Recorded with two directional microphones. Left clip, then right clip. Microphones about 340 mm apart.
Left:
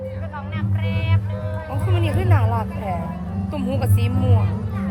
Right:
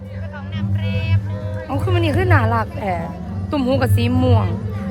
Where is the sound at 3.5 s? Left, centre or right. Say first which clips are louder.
Right 8 dB; right.